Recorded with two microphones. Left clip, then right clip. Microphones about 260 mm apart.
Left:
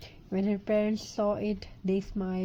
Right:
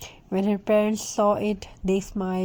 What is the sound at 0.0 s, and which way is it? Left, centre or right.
Speech, right.